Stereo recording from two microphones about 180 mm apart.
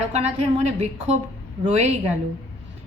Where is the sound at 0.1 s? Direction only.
35° right (ahead or behind).